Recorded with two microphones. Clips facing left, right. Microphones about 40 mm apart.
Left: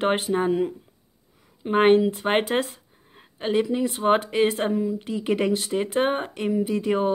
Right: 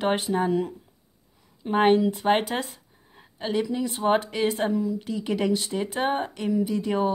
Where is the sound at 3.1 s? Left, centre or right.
Left.